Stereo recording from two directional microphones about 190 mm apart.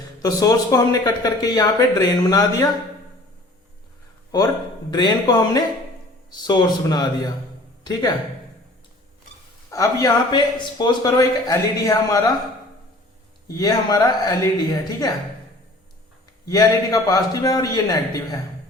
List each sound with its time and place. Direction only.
0.2 s a man's voice: 20° left (ahead or behind)
4.3 s a man's voice: 20° left (ahead or behind)
9.6 s a man's voice: 15° left (ahead or behind)
13.5 s a man's voice: 20° left (ahead or behind)
16.5 s a man's voice: 20° left (ahead or behind)